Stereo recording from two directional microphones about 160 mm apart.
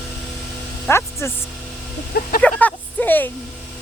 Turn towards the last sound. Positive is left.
turn(degrees=10)  # may be behind; listen again after turning